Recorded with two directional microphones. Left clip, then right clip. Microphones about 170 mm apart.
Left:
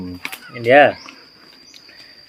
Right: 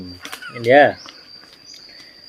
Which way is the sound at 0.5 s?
5° right (ahead or behind).